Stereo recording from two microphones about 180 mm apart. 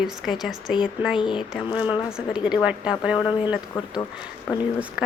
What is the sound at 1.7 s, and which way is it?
Speech, 10° right (ahead or behind).